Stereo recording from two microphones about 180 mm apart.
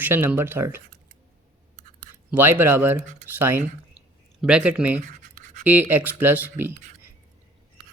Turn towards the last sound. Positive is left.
turn(degrees=-10)  # may be behind; listen again after turning